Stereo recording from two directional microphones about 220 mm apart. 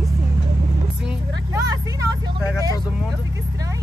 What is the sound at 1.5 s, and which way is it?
Speech, 15° right (ahead or behind).